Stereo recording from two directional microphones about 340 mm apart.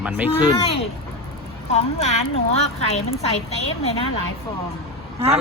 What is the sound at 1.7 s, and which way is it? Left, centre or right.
A woman's voice, centre.